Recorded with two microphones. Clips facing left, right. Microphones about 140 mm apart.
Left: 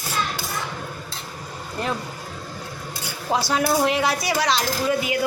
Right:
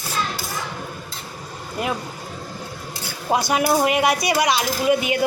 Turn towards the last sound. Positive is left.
turn(degrees=-20)  # may be behind; listen again after turning